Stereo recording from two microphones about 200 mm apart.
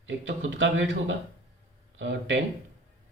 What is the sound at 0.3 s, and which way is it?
A man's voice, 65° right (ahead or behind).